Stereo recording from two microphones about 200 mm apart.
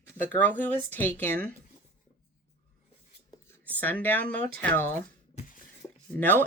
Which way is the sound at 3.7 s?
10° left (ahead or behind).